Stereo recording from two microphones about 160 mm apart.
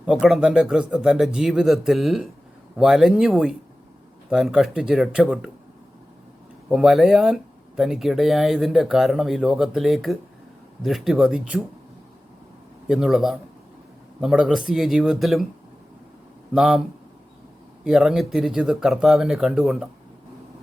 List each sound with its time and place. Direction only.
0.0 s speech: 5° right (ahead or behind)
6.7 s speech: centre (ahead or behind)
12.9 s speech: 5° right (ahead or behind)
16.6 s speech: centre (ahead or behind)
17.8 s speech: 5° right (ahead or behind)